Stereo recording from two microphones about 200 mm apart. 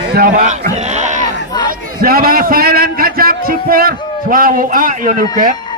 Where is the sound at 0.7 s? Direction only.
35° right (ahead or behind).